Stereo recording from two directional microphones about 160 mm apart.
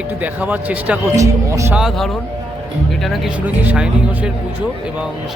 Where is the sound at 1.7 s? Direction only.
Centre (ahead or behind).